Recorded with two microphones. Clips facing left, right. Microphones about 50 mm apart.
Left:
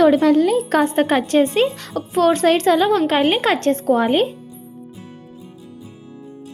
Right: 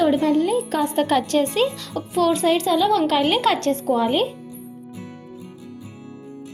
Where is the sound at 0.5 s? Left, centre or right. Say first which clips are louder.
Left 5 dB; left.